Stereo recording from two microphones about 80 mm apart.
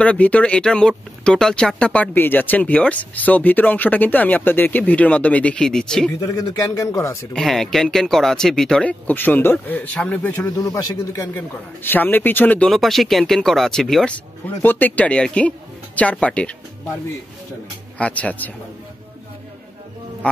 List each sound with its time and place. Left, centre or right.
0.0 s speech: centre
2.1 s speech: left; by 6.1 s centre
6.1 s a man's voice: left
7.3 s speech: centre
9.0 s speech: left
10.6 s speech: left
11.3 s speech: left
12.6 s speech: centre
14.4 s speech: left
17.9 s speech: centre